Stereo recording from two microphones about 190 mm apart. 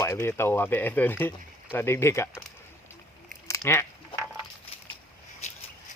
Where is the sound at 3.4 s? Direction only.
15° left (ahead or behind).